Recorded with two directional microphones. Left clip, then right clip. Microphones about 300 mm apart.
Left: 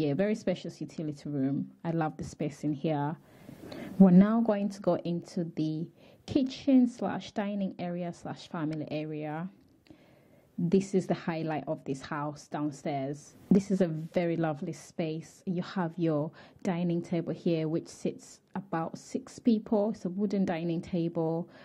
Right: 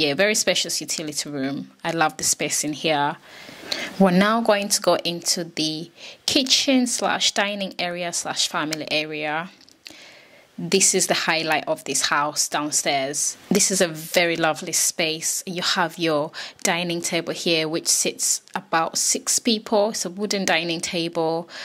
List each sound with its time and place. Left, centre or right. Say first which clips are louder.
0.0 s speech: right 11 dB; centre
3.6 s a sound: right 15 dB; centre
3.9 s speech: right 7 dB; centre
10.7 s speech: right 10 dB; centre
21.2 s speech: right 10 dB; right